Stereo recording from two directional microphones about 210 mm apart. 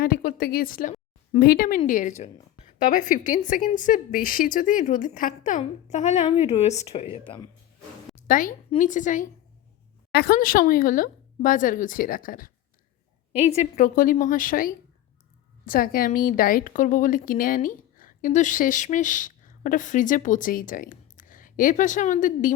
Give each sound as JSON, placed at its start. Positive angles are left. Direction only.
{"t": 0.0, "sound": "a woman's voice", "side_deg": 45}
{"t": 8.1, "sound": "a sound", "side_deg": 40}
{"t": 8.7, "sound": "a woman's voice", "side_deg": 35}
{"t": 10.1, "sound": "a woman's voice", "side_deg": 50}
{"t": 13.5, "sound": "a woman's voice", "side_deg": 35}